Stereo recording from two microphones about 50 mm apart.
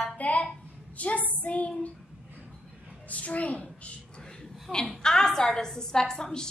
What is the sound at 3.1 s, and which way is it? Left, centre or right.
Speech, left.